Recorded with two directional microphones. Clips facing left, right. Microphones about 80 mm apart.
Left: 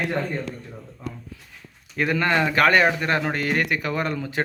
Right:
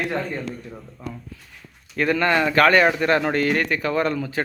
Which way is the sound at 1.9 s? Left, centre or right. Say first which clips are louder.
Right 2 dB; centre.